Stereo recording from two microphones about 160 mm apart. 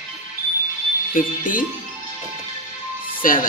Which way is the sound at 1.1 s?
60° left (ahead or behind).